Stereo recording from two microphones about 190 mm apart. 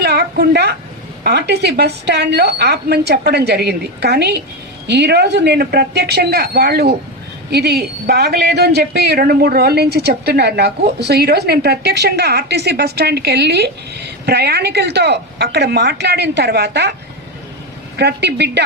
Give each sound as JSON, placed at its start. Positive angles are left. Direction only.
{"t": 0.0, "sound": "a woman's voice", "side_deg": -55}
{"t": 17.9, "sound": "a man's voice", "side_deg": -60}